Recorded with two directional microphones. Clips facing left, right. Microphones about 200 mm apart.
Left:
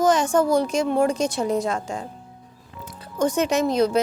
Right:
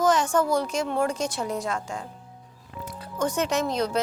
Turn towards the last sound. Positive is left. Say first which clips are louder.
# left 6 dB
turn(degrees=10)  # may be behind; listen again after turning